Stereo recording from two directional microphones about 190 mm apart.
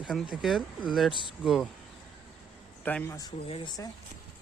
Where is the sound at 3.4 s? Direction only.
30° left (ahead or behind).